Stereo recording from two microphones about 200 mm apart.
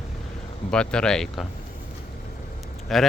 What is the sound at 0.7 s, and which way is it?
Speech, 5° left (ahead or behind).